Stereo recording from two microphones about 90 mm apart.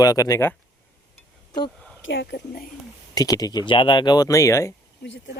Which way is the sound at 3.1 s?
45° left (ahead or behind).